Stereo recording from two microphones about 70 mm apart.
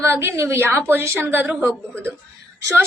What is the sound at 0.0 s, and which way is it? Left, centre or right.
A woman's voice, right.